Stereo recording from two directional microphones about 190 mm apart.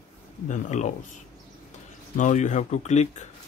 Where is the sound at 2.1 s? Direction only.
40° left (ahead or behind).